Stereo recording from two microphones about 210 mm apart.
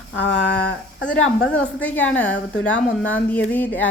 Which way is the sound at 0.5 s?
5° left (ahead or behind).